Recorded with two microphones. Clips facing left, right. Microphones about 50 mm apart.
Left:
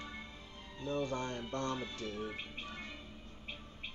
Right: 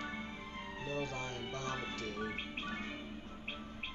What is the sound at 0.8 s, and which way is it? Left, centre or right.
Speech, right.